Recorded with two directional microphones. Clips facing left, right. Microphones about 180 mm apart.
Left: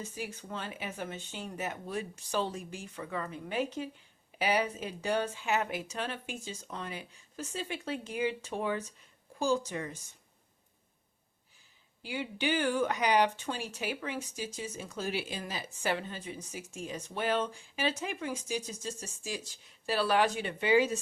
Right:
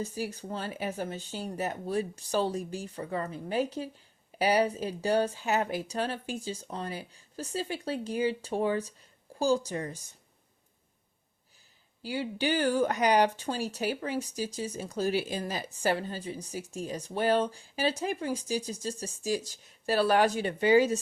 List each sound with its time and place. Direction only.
0.0 s speech: 40° right (ahead or behind)
12.0 s speech: 35° right (ahead or behind)